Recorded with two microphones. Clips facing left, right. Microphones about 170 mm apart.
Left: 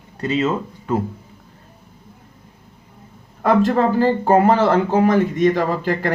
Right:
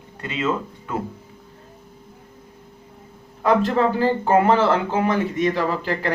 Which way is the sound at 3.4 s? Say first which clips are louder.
Left 2 dB; 50° left (ahead or behind).